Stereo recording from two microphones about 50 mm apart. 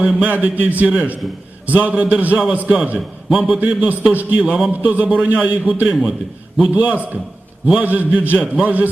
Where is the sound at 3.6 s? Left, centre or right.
Right.